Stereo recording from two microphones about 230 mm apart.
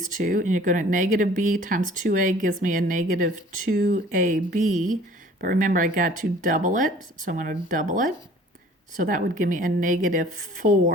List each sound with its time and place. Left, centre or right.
0.0 s speech: right